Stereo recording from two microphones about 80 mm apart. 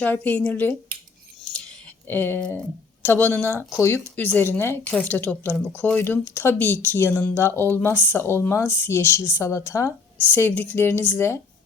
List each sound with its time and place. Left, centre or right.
0.0 s speech: left
2.0 s speech: left
3.7 s speech: left
4.2 s speech: left
7.3 s speech: left
10.2 s speech: left